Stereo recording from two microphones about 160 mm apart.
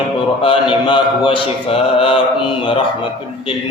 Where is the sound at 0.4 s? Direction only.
30° left (ahead or behind).